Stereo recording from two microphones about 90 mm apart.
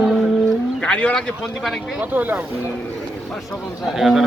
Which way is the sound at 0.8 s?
15° left (ahead or behind).